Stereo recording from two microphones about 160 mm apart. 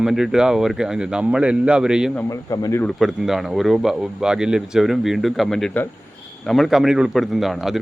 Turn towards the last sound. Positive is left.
turn(degrees=0)  # may be behind; listen again after turning